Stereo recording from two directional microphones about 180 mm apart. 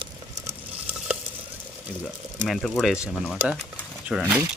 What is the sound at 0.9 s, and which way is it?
Stir, 5° right (ahead or behind).